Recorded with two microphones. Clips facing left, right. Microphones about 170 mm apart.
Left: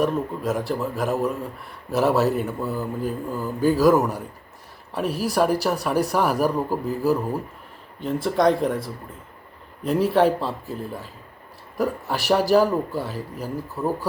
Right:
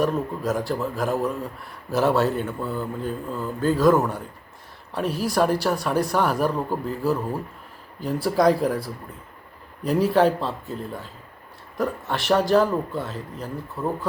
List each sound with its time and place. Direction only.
0.0 s speech: centre (ahead or behind)
9.8 s speech: centre (ahead or behind)